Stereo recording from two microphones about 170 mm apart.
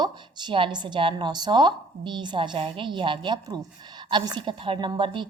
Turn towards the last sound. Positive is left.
turn(degrees=-30)  # may be behind; listen again after turning